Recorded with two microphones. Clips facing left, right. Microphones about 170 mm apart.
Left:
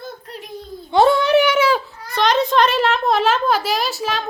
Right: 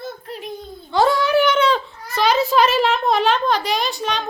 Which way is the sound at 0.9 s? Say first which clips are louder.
Left 3 dB; 25° left (ahead or behind).